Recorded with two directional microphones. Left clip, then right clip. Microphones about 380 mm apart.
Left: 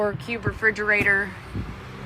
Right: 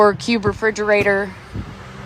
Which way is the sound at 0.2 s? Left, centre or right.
Centre.